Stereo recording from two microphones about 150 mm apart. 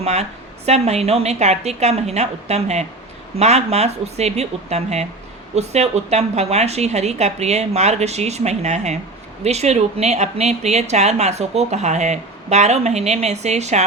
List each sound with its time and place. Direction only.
0.0 s speech: 45° right (ahead or behind)